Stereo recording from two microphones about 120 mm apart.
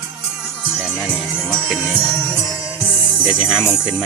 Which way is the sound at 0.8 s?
5° right (ahead or behind).